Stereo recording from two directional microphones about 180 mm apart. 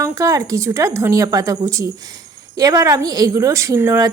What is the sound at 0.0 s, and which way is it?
A woman's voice, 20° right (ahead or behind).